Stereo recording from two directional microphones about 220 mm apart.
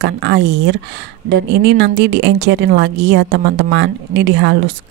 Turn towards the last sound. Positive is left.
turn(degrees=-50)  # may be behind; listen again after turning